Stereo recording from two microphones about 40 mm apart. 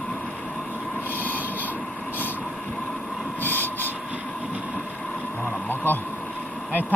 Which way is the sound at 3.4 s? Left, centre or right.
Left.